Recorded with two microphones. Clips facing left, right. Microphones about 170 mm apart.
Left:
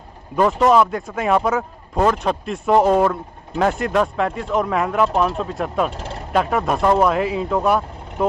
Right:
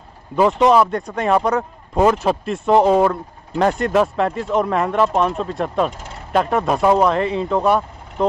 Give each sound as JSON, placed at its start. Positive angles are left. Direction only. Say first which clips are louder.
{"t": 0.4, "sound": "speech", "louder": "right 1 dB", "side_deg": -5}